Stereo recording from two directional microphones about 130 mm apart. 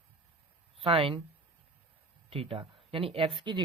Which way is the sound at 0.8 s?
45° right (ahead or behind).